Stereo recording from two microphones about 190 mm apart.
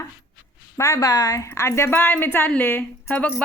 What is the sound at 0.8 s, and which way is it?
A woman's voice, 15° left (ahead or behind).